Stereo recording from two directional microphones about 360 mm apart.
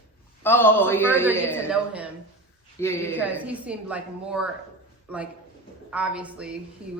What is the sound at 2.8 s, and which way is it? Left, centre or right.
Speech, centre.